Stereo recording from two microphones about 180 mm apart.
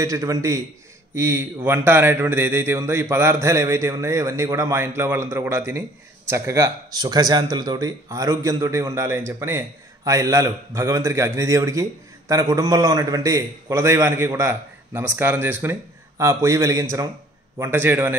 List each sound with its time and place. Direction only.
0.0 s speech: 15° right (ahead or behind)